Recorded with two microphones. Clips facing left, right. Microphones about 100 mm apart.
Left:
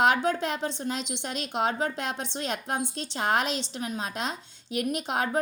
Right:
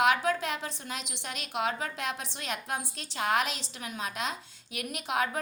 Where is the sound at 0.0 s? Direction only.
30° left (ahead or behind).